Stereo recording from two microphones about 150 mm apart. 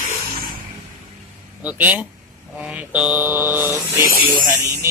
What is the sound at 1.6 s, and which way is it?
Speech, 10° right (ahead or behind).